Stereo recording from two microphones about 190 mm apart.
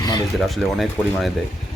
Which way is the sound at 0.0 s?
20° left (ahead or behind).